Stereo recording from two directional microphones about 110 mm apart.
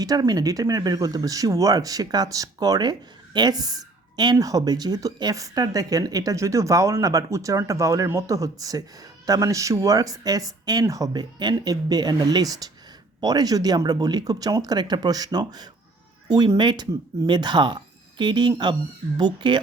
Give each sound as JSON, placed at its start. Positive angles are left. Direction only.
{"t": 0.0, "sound": "speech", "side_deg": -35}